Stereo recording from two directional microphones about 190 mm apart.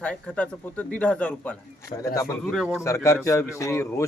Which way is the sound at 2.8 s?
15° left (ahead or behind).